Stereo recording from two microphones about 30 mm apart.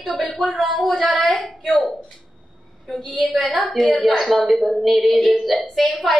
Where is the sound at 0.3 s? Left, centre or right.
Left.